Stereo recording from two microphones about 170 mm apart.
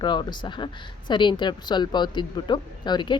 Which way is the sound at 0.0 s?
25° left (ahead or behind).